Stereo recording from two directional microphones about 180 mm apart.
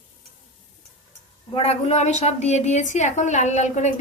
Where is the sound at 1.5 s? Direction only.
35° left (ahead or behind).